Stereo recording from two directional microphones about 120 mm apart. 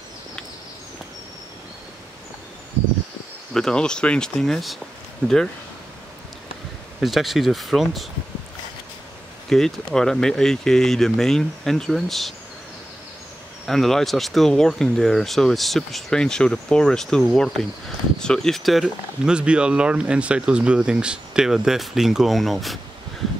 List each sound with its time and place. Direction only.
3.5 s speech: 5° left (ahead or behind)
7.0 s speech: centre (ahead or behind)
9.5 s speech: 5° left (ahead or behind)
13.7 s speech: 5° left (ahead or behind)